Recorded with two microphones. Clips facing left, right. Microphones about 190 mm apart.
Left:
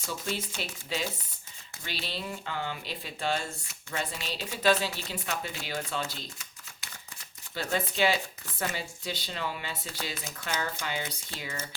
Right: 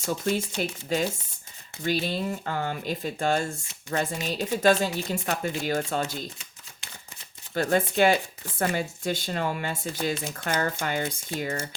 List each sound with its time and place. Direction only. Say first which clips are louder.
0.0 s speech: right 8 dB; 45° right (ahead or behind)
7.5 s speech: right 8 dB; 50° right (ahead or behind)